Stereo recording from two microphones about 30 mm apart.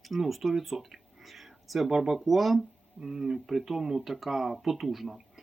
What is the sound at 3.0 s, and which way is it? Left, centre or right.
Speech, centre.